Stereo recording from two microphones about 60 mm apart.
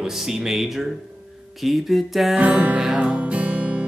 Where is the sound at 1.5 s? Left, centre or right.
Centre.